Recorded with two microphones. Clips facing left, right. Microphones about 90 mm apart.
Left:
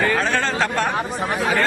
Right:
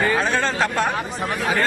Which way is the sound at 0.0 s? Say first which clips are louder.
Even; 10° right (ahead or behind).